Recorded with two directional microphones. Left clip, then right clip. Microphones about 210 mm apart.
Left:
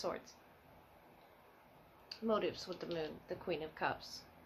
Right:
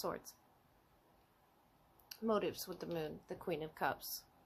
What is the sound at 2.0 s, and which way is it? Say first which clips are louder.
Speech: left 1 dB; 50° right (ahead or behind).